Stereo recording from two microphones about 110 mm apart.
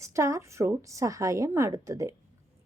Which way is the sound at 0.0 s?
30° right (ahead or behind).